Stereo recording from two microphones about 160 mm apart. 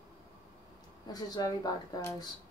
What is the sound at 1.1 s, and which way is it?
Speech, 25° left (ahead or behind).